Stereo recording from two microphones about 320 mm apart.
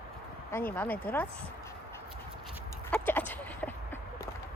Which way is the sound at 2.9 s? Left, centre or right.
Centre.